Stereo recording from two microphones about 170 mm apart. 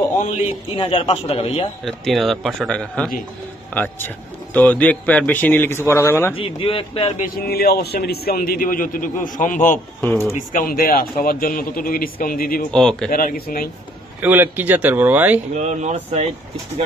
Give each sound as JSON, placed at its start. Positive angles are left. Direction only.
{"t": 0.2, "sound": "a man's voice", "side_deg": 45}
{"t": 0.7, "sound": "speech", "side_deg": 30}
{"t": 1.9, "sound": "speech", "side_deg": 0}
{"t": 6.3, "sound": "speech", "side_deg": 30}
{"t": 7.2, "sound": "a man's voice", "side_deg": 60}
{"t": 10.0, "sound": "speech", "side_deg": 15}
{"t": 10.3, "sound": "a man's voice", "side_deg": 55}
{"t": 12.7, "sound": "speech", "side_deg": 5}
{"t": 13.1, "sound": "a man's voice", "side_deg": 55}
{"t": 14.2, "sound": "speech", "side_deg": -10}
{"t": 15.5, "sound": "speech", "side_deg": -45}